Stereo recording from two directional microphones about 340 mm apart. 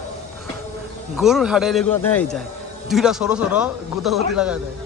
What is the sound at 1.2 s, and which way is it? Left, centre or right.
A man's voice, centre.